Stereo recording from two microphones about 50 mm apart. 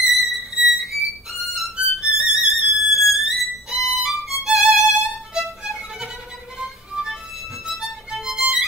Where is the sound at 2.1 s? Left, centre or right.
Centre.